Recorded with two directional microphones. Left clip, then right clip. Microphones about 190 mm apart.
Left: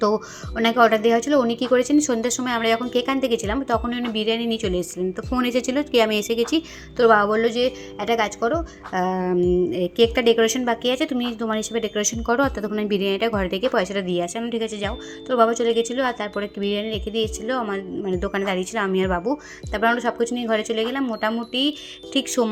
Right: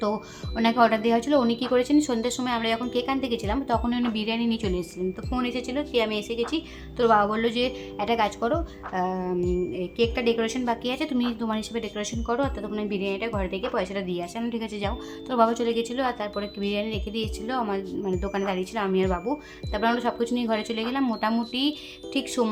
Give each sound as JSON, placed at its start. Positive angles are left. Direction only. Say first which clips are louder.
{"t": 0.5, "sound": "a woman's voice", "louder": "left 4 dB", "side_deg": 15}
{"t": 9.0, "sound": "a woman's voice", "louder": "left 6 dB", "side_deg": 25}